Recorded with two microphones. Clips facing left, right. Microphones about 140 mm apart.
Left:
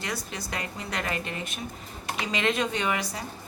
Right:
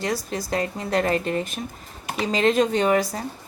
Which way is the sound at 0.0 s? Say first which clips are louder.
Right 8 dB; 40° right (ahead or behind).